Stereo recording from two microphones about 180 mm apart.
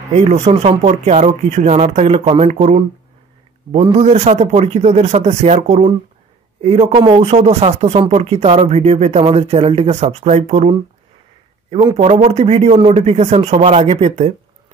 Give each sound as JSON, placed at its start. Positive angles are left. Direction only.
{"t": 0.1, "sound": "speech", "side_deg": -40}
{"t": 3.9, "sound": "speech", "side_deg": -40}
{"t": 11.8, "sound": "speech", "side_deg": -35}